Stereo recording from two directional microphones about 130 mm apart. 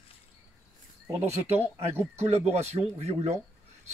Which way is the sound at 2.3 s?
55° right (ahead or behind).